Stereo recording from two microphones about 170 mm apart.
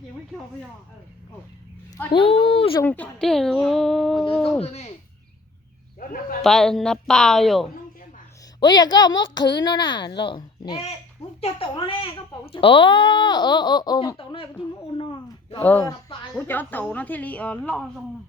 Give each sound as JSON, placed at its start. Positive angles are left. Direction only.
{"t": 2.1, "sound": "speech", "side_deg": 35}
{"t": 2.8, "sound": "speech", "side_deg": 10}
{"t": 4.6, "sound": "speech", "side_deg": 40}
{"t": 6.4, "sound": "speech", "side_deg": 5}
{"t": 8.6, "sound": "speech", "side_deg": 25}
{"t": 14.9, "sound": "a sound", "side_deg": 30}
{"t": 15.8, "sound": "a woman's voice", "side_deg": 20}